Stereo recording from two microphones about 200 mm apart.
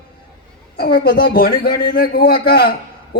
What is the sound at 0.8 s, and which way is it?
A man's voice, 50° left (ahead or behind).